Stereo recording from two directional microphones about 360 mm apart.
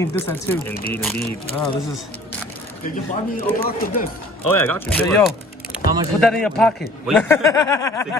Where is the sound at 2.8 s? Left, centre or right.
Left.